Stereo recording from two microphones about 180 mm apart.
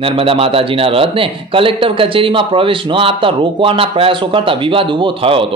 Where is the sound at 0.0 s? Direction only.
30° right (ahead or behind).